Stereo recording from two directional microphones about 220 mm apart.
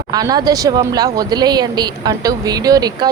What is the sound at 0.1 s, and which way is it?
Speech, 15° right (ahead or behind).